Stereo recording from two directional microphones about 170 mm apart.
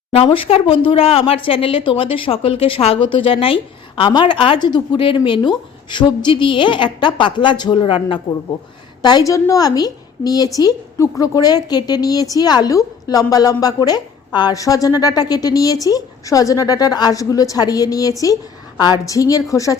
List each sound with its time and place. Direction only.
0.1 s a woman's voice: 35° left (ahead or behind); by 19.8 s 20° left (ahead or behind)